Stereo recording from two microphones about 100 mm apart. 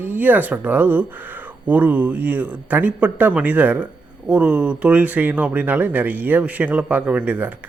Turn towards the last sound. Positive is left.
turn(degrees=-15)  # may be behind; listen again after turning